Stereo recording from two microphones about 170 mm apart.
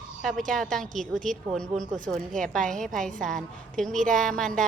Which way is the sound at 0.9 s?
50° right (ahead or behind).